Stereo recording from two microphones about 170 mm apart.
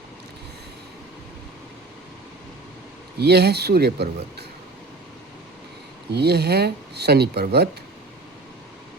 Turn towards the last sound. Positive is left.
turn(degrees=-75)  # may be behind; listen again after turning